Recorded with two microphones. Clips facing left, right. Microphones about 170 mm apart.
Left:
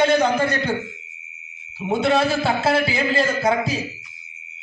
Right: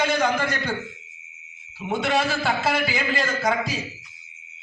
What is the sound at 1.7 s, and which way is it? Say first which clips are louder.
A man's voice: left 5 dB; 25° left (ahead or behind).